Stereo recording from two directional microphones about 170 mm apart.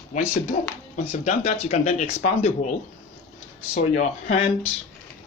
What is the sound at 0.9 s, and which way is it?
Speech, 45° left (ahead or behind).